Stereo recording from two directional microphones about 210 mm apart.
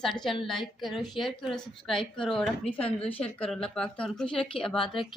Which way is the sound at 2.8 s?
30° left (ahead or behind).